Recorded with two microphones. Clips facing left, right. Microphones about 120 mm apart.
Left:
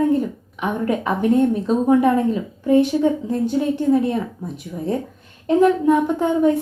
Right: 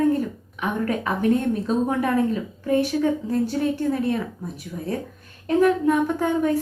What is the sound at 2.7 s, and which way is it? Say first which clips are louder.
A woman's voice: left 5 dB; 20° left (ahead or behind).